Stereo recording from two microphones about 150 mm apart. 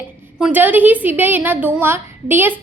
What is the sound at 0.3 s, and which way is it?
A woman's voice, 10° right (ahead or behind).